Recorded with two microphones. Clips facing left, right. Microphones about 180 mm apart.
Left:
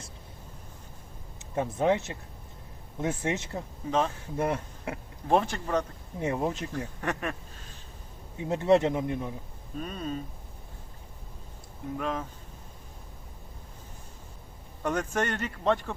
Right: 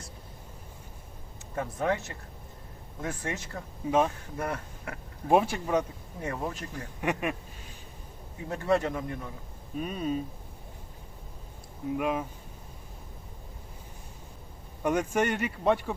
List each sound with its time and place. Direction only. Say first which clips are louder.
1.5 s speech: left 4 dB; 20° left (ahead or behind)
3.8 s speech: right 3 dB; 10° right (ahead or behind)
4.4 s speech: left 5 dB; 20° left (ahead or behind)
5.3 s speech: right 2 dB; 10° right (ahead or behind)
6.1 s speech: left 5 dB; 20° left (ahead or behind)
7.0 s quack: right 6 dB; 10° right (ahead or behind)
8.4 s speech: left 4 dB; 20° left (ahead or behind)
9.7 s speech: right 3 dB; 10° right (ahead or behind)
11.9 s speech: right 3 dB; 10° right (ahead or behind)
14.8 s speech: right 2 dB; 10° right (ahead or behind)